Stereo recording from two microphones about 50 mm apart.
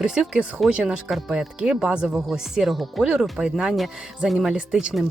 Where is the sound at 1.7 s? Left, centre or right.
Centre.